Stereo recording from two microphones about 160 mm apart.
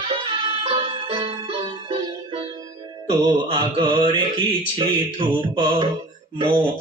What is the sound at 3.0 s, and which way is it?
Mantra, 30° right (ahead or behind).